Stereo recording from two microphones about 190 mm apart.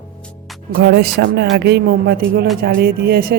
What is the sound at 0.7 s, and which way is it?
Speech, 55° right (ahead or behind).